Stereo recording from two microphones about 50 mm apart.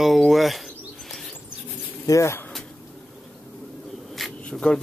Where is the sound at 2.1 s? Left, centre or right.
Left.